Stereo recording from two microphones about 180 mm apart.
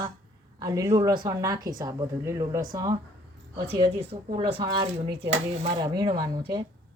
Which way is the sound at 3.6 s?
30° right (ahead or behind).